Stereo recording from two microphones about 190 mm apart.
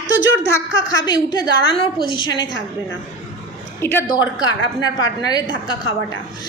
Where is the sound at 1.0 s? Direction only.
20° left (ahead or behind).